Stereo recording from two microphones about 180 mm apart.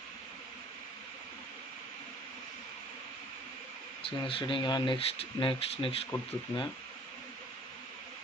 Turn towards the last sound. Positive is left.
turn(degrees=35)  # may be behind; listen again after turning